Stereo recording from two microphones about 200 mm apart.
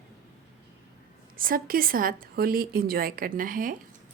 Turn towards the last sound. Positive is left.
turn(degrees=-45)  # may be behind; listen again after turning